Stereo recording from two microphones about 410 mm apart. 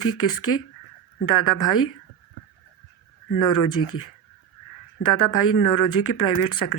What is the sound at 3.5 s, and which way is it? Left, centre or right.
Speech, left.